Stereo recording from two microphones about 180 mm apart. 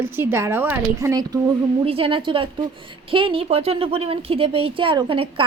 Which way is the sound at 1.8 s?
30° right (ahead or behind).